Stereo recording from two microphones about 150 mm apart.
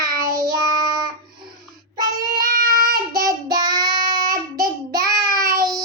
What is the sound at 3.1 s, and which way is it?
Child singing, 25° right (ahead or behind).